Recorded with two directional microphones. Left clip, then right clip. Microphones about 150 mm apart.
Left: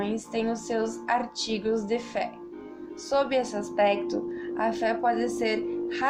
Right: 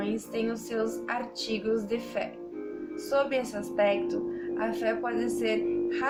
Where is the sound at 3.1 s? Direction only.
20° left (ahead or behind).